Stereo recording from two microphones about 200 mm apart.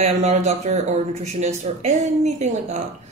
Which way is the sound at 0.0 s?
35° right (ahead or behind).